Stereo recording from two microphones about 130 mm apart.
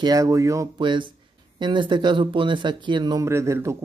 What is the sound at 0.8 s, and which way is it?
Speech, 35° right (ahead or behind).